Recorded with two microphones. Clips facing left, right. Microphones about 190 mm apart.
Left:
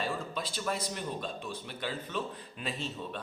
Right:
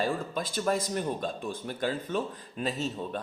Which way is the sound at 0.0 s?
45° right (ahead or behind).